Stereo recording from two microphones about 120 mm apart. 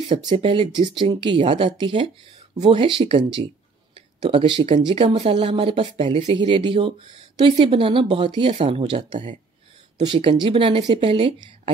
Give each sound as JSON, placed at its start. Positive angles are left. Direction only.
{"t": 0.4, "sound": "speech", "side_deg": -50}